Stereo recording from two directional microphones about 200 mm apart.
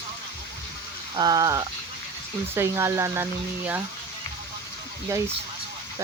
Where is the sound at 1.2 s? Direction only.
20° right (ahead or behind).